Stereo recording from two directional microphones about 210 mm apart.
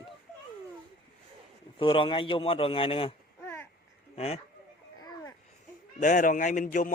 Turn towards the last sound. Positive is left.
turn(degrees=40)  # may be behind; listen again after turning